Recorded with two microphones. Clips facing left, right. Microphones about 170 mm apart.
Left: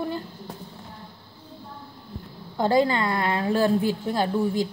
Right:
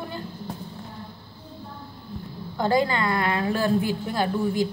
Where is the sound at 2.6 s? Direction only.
30° left (ahead or behind).